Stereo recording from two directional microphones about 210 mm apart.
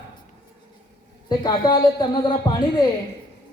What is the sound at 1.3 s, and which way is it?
Speech, 20° left (ahead or behind).